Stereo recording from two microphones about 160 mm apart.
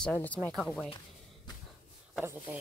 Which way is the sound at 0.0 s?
10° left (ahead or behind).